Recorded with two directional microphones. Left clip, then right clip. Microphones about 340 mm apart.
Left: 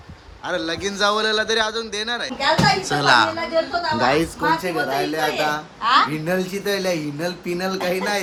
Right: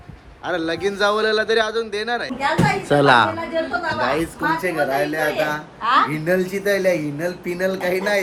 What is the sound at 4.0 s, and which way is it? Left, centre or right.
Speech, left.